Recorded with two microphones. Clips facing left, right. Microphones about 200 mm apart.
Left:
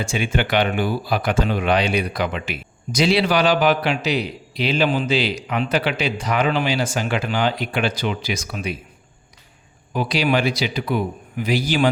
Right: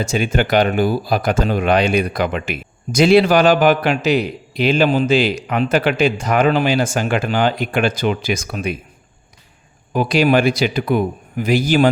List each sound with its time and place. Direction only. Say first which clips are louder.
0.0 s speech: right 4 dB; 40° right (ahead or behind)
9.9 s speech: right 5 dB; 50° right (ahead or behind)